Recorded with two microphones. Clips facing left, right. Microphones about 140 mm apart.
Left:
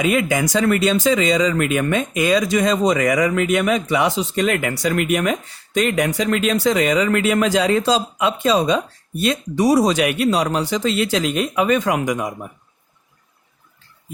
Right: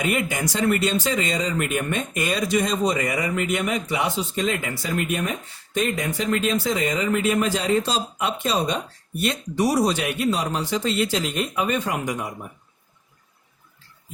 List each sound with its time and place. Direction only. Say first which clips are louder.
0.0 s speech: left 6 dB; 90° left